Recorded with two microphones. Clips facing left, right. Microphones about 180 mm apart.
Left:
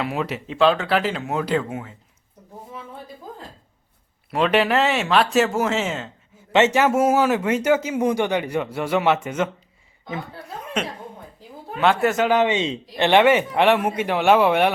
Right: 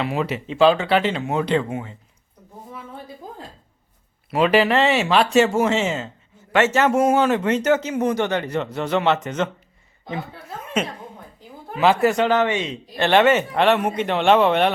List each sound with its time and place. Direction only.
0.0 s speech: centre (ahead or behind)
4.3 s speech: centre (ahead or behind)
6.5 s speech: 15° left (ahead or behind)
10.1 s speech: 5° right (ahead or behind)
12.4 s a man's voice: 20° left (ahead or behind)
13.1 s speech: 15° left (ahead or behind)